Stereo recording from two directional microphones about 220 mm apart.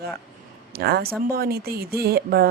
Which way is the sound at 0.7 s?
45° right (ahead or behind).